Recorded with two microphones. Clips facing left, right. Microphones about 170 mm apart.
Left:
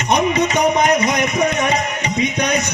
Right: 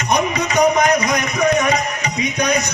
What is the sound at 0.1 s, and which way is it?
Music, 25° left (ahead or behind).